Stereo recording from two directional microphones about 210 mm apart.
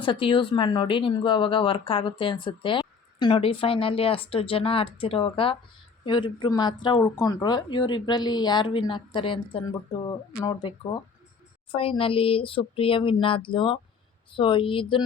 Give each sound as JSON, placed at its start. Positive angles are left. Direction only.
{"t": 0.0, "sound": "speech", "side_deg": 25}